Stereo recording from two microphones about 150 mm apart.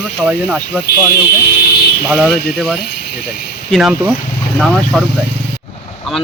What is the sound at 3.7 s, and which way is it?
Speech, 5° right (ahead or behind).